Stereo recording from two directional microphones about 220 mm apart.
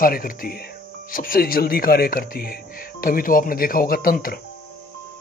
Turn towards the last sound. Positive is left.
turn(degrees=40)  # may be behind; listen again after turning